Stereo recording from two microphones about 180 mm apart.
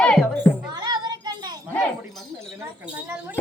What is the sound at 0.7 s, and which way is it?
Child singing, 20° right (ahead or behind).